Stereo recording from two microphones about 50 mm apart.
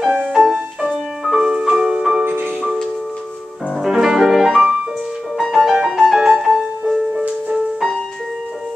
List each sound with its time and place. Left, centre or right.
0.0 s music: centre
2.2 s music: right
3.7 s music: centre